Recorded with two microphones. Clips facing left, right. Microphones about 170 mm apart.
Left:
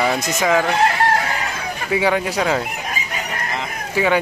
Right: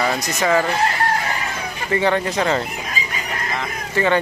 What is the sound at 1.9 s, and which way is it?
Speech, 5° left (ahead or behind).